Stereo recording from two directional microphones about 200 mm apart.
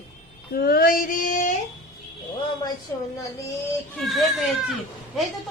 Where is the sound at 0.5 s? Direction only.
50° left (ahead or behind).